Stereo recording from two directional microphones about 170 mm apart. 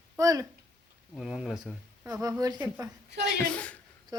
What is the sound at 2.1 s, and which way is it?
Speech, 20° right (ahead or behind).